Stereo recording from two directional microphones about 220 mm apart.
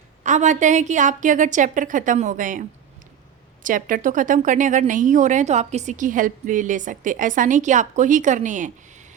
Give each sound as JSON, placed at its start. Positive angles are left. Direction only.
{"t": 0.2, "sound": "speech", "side_deg": -35}